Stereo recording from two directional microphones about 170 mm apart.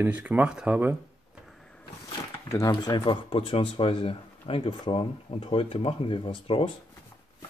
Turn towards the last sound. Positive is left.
turn(degrees=30)  # may be behind; listen again after turning